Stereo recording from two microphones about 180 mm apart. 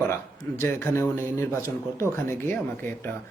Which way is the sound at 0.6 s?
15° left (ahead or behind).